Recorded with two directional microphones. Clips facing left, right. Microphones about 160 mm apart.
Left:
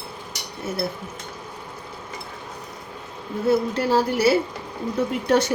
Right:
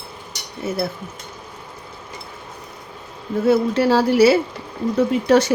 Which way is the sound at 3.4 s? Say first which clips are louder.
Right 4 dB; 90° right.